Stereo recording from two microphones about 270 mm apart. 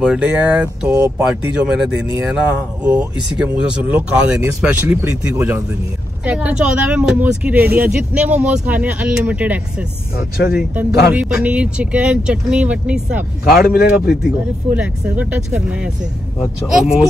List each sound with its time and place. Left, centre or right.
0.0 s speech: centre
10.1 s speech: left
10.5 s speech: centre
14.7 s speech: centre